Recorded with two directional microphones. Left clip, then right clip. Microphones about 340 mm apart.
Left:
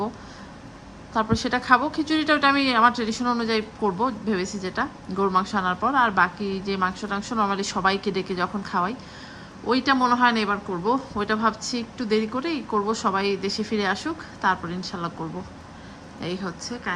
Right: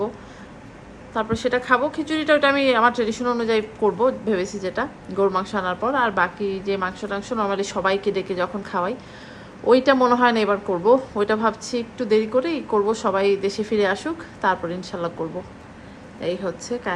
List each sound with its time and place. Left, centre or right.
1.1 s a woman's voice: centre
16.2 s a woman's voice: centre